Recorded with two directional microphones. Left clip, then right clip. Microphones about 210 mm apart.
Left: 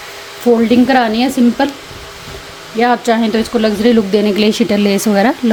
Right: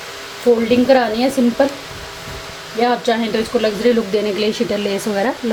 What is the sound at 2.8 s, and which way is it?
Speech, 50° left (ahead or behind).